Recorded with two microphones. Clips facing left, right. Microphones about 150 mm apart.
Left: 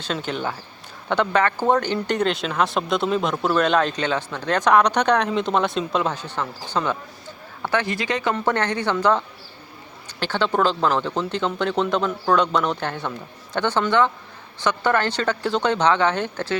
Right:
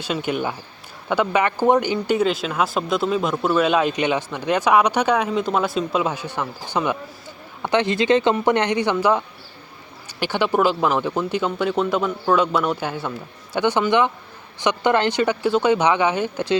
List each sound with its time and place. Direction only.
0.0 s speech: 10° right (ahead or behind)